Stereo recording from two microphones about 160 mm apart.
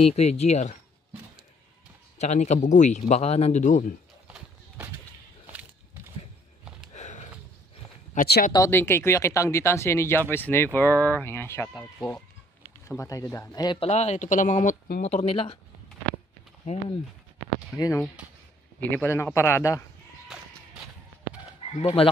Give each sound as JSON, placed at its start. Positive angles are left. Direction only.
{"t": 0.0, "sound": "speech", "side_deg": 40}
{"t": 2.1, "sound": "speech", "side_deg": 45}
{"t": 6.9, "sound": "sniff", "side_deg": 45}
{"t": 8.2, "sound": "speech", "side_deg": 55}
{"t": 8.5, "sound": "speech", "side_deg": 15}
{"t": 12.8, "sound": "speech", "side_deg": 20}
{"t": 13.7, "sound": "speech", "side_deg": 45}
{"t": 16.7, "sound": "speech", "side_deg": 40}
{"t": 17.7, "sound": "speech", "side_deg": 20}
{"t": 20.3, "sound": "a sound", "side_deg": -5}
{"t": 21.8, "sound": "speech", "side_deg": 35}